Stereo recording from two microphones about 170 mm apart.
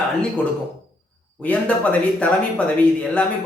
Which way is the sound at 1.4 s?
10° left (ahead or behind).